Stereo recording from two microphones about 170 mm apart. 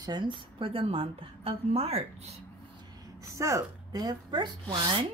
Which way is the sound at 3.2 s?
15° right (ahead or behind).